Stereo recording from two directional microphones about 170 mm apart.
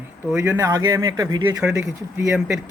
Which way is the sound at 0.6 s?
20° right (ahead or behind).